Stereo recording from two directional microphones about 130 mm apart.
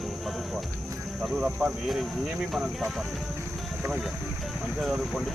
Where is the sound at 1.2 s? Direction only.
5° right (ahead or behind).